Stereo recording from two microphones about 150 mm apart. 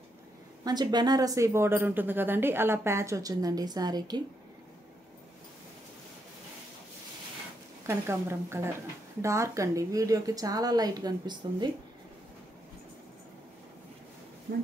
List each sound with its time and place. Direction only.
0.7 s speech: 25° right (ahead or behind)
7.8 s a woman's voice: 15° right (ahead or behind)